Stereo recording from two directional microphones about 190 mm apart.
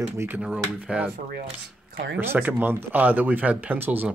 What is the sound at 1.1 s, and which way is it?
Speech, 50° right (ahead or behind).